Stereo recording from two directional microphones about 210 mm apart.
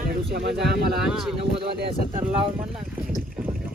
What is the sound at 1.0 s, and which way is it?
Speech, centre (ahead or behind).